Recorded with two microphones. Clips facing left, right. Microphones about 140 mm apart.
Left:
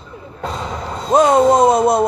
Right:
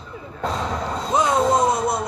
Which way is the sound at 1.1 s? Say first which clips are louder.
Left 8 dB; 60° left (ahead or behind).